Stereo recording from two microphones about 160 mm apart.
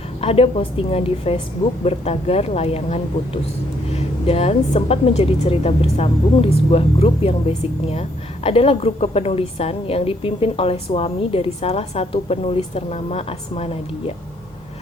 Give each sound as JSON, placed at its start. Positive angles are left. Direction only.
{"t": 0.2, "sound": "a woman's voice", "side_deg": 35}